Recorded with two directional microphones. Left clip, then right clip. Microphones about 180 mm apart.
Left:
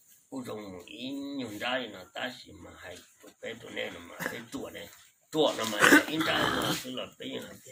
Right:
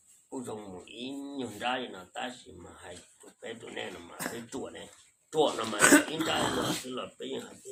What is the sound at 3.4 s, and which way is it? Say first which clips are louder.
Speech: left 2 dB; 20° right (ahead or behind).